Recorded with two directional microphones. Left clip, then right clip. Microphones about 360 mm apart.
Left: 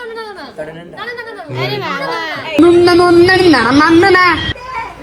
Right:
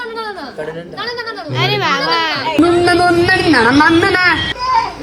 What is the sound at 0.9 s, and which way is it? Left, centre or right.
Speech, left.